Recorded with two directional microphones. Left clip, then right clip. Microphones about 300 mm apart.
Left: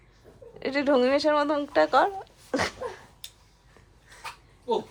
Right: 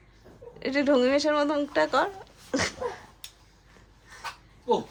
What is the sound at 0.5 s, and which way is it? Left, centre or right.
Speech, centre.